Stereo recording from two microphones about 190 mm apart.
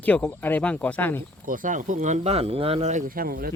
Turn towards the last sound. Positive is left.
turn(degrees=-50)  # may be behind; listen again after turning